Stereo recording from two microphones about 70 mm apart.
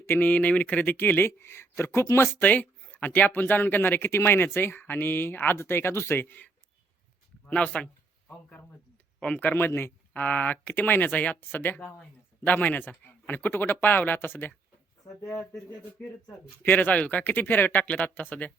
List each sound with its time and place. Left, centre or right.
0.0 s speech: left
0.3 s speech: left
2.4 s speech: left
16.6 s speech: left